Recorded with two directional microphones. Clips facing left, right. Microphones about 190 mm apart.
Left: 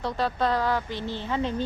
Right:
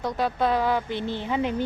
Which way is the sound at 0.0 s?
20° right (ahead or behind).